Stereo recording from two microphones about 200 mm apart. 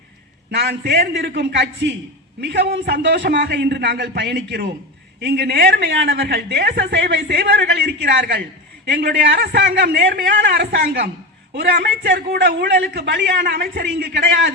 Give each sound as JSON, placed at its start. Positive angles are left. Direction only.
{"t": 0.5, "sound": "a woman's voice", "side_deg": -55}